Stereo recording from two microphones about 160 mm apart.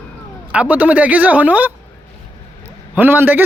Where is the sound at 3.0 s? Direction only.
10° right (ahead or behind).